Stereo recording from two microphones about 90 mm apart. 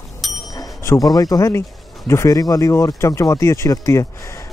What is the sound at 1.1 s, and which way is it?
Speech, 45° left (ahead or behind).